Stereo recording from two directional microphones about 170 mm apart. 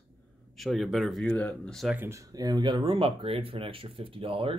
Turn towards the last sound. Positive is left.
turn(degrees=-30)  # may be behind; listen again after turning